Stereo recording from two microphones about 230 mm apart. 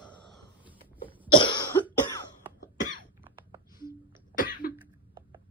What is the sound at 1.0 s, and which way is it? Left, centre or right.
Cough, centre.